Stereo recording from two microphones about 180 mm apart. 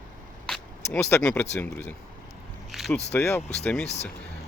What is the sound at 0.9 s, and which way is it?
Speech, 10° left (ahead or behind).